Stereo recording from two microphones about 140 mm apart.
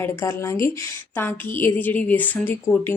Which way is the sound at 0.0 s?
20° left (ahead or behind).